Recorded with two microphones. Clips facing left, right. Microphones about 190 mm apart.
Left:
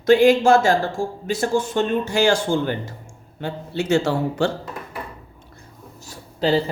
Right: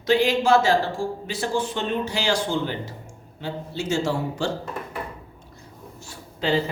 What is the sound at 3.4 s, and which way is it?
Speech, 60° left (ahead or behind).